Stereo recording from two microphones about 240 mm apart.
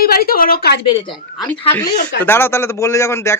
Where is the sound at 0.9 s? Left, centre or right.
Centre.